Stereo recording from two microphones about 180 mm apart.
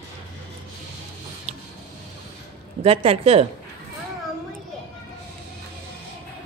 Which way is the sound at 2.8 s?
35° right (ahead or behind).